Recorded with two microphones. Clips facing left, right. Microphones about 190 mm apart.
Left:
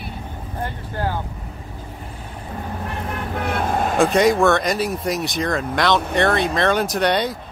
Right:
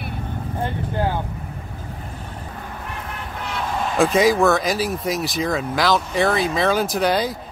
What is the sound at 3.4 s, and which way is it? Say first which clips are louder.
Vehicle: left 3 dB; 55° left (ahead or behind).